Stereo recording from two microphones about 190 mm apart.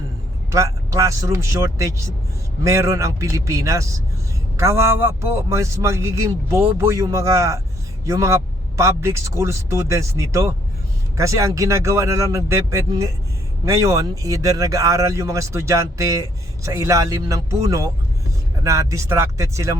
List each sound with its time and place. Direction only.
0.5 s speech: 15° right (ahead or behind)